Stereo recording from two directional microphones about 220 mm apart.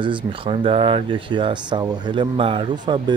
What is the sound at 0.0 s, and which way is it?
Speech, 25° right (ahead or behind).